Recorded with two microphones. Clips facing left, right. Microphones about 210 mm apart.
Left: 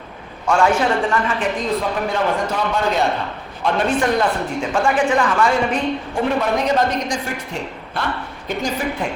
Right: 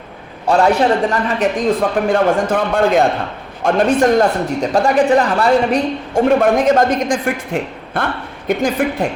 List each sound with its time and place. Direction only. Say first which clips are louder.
0.4 s a man's voice: right 4 dB; 35° right (ahead or behind); by 9.0 s 55° right (ahead or behind)